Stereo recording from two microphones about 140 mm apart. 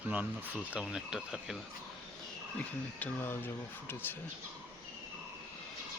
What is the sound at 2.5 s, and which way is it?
Speech, 15° left (ahead or behind).